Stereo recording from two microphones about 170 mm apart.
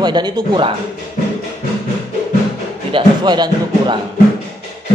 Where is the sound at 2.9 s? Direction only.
25° right (ahead or behind).